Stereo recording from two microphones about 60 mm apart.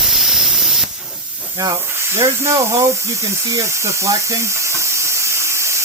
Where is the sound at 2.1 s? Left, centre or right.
Right.